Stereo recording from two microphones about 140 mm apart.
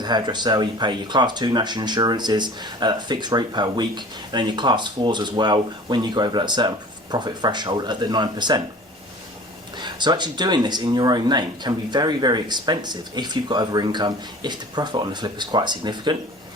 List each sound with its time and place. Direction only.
0.0 s speech: 30° right (ahead or behind)
9.7 s speech: 30° right (ahead or behind)